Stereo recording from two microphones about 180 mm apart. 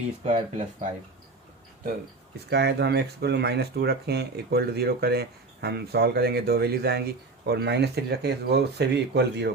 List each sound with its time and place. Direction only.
0.3 s speech: 40° right (ahead or behind)
2.5 s speech: 70° right (ahead or behind)